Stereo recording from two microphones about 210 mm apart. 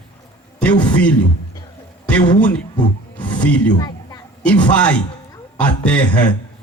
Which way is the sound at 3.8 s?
20° left (ahead or behind).